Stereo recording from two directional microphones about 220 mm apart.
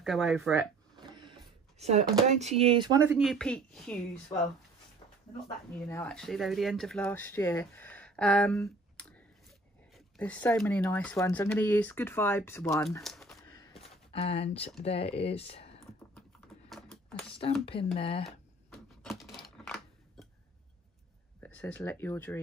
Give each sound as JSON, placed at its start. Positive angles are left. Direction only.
{"t": 0.0, "sound": "speech", "side_deg": 0}
{"t": 0.9, "sound": "speech", "side_deg": -20}
{"t": 3.2, "sound": "speech", "side_deg": 0}
{"t": 4.3, "sound": "speech", "side_deg": 15}
{"t": 5.9, "sound": "speech", "side_deg": 15}
{"t": 6.1, "sound": "speech", "side_deg": 0}
{"t": 13.0, "sound": "a sound", "side_deg": 0}
{"t": 13.6, "sound": "a sound", "side_deg": 25}
{"t": 14.8, "sound": "speech", "side_deg": 25}
{"t": 16.2, "sound": "typing", "side_deg": 0}
{"t": 17.9, "sound": "speech", "side_deg": 25}
{"t": 18.2, "sound": "a sound", "side_deg": 0}
{"t": 21.4, "sound": "speech", "side_deg": 5}